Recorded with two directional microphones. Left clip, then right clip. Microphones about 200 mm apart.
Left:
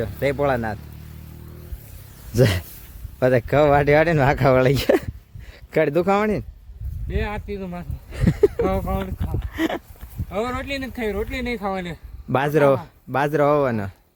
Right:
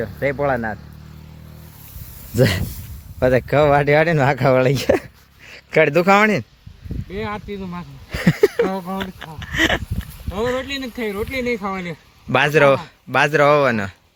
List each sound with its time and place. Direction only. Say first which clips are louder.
0.0 s speech: right 1 dB; 10° left (ahead or behind)
2.3 s speech: right 2 dB; centre (ahead or behind)
8.1 s a sound: right 3 dB; 5° left (ahead or behind)
9.0 s speech: right 1 dB; 5° left (ahead or behind)
10.3 s speech: right 3 dB; 25° left (ahead or behind); by 13.9 s 10° left (ahead or behind)